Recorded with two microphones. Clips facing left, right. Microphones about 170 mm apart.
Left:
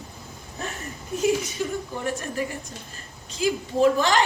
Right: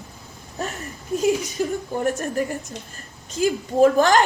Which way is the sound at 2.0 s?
45° right (ahead or behind).